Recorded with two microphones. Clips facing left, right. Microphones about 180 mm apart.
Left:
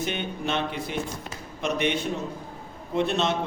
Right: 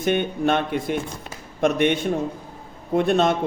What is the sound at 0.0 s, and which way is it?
A man's voice, 50° right (ahead or behind).